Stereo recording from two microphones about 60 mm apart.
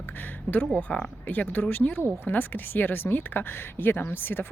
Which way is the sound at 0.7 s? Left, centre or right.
Centre.